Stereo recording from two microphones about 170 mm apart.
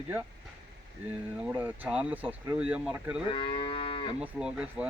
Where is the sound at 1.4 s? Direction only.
10° right (ahead or behind).